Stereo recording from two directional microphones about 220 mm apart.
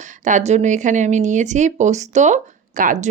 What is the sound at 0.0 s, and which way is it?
Speech, 35° right (ahead or behind).